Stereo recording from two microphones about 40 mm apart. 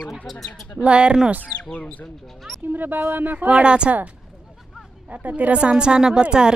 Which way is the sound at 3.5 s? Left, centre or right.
Right.